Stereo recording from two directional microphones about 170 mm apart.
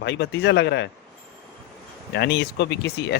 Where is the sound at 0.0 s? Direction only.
90° left.